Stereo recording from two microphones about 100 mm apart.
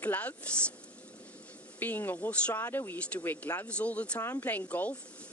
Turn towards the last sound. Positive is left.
turn(degrees=15)  # may be behind; listen again after turning